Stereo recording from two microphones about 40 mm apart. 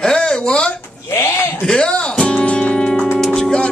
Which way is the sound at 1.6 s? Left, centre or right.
Left.